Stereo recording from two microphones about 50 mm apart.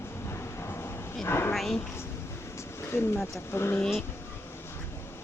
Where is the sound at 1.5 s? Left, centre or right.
Centre.